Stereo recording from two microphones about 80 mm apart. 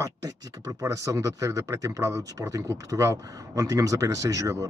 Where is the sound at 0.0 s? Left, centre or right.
Right.